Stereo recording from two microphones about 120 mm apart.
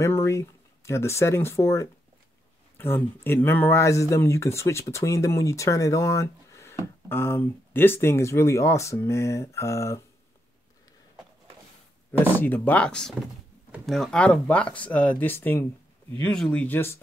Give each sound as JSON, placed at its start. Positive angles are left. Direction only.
{"t": 0.0, "sound": "speech", "side_deg": 25}
{"t": 12.4, "sound": "speech", "side_deg": 15}
{"t": 16.3, "sound": "speech", "side_deg": 5}
{"t": 16.6, "sound": "speech", "side_deg": 20}